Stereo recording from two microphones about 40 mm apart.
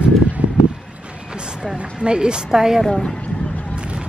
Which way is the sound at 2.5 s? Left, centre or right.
Centre.